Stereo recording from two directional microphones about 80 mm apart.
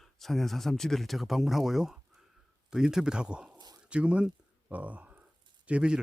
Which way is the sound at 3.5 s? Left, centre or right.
Right.